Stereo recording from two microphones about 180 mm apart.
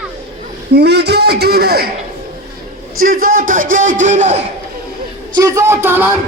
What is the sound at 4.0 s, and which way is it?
Speech, 40° right (ahead or behind).